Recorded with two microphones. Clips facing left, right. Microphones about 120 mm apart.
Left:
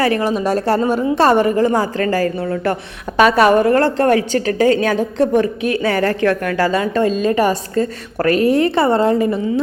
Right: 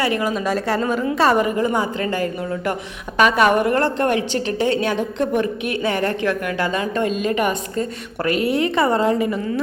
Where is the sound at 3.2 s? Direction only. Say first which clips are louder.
Left 4 dB; 35° left (ahead or behind).